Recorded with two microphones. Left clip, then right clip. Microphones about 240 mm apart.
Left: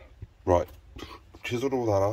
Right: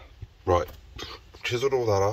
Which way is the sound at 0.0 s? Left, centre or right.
Centre.